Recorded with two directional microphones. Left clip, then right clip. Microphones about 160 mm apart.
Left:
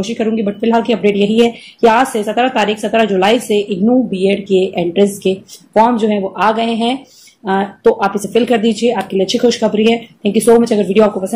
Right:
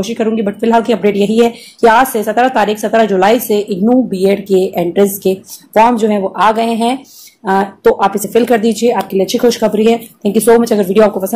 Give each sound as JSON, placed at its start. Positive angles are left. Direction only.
{"t": 0.0, "sound": "speech", "side_deg": -25}